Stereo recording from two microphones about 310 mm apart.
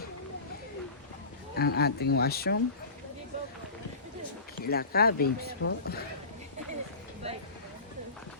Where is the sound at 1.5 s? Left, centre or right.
Left.